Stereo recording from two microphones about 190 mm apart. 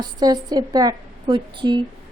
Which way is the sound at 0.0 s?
20° right (ahead or behind).